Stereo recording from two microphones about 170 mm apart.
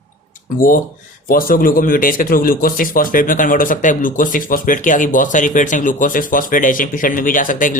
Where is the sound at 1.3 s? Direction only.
55° left (ahead or behind).